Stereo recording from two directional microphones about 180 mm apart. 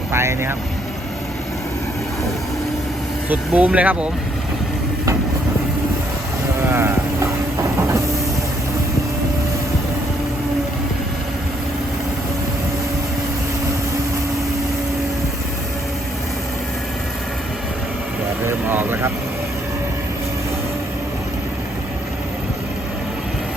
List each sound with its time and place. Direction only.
0.1 s speech: 15° right (ahead or behind)
3.2 s speech: 10° right (ahead or behind)
6.7 s sheep: 15° right (ahead or behind)
7.8 s vehicle: 15° right (ahead or behind)
18.4 s vehicle: 10° right (ahead or behind)